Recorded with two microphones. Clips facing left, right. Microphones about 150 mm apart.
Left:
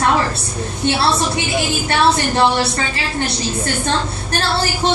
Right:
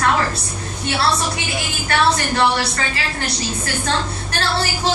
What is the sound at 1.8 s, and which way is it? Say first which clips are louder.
Speech: even; 30° left (ahead or behind).